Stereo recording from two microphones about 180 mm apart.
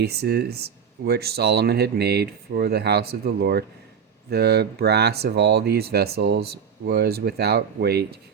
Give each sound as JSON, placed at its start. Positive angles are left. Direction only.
{"t": 0.0, "sound": "speech", "side_deg": -60}